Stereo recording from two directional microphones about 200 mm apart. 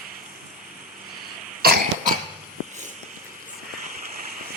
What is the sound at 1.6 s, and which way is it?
Cough, 50° right (ahead or behind).